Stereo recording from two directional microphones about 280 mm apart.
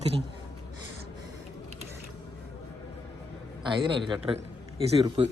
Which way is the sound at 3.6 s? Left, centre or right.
Centre.